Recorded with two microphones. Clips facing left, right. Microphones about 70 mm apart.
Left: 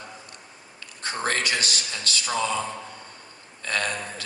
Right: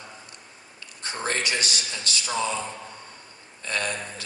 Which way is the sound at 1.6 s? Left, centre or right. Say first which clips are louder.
Left 1 dB; left.